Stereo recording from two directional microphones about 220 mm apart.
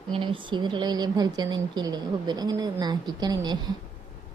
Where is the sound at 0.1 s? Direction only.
25° right (ahead or behind).